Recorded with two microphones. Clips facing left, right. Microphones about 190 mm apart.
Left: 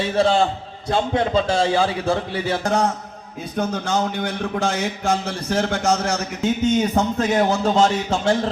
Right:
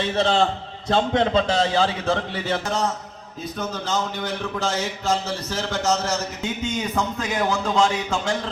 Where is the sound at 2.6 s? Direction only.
60° left (ahead or behind).